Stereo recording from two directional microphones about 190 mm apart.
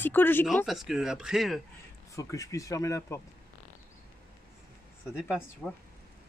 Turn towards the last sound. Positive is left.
turn(degrees=10)  # may be behind; listen again after turning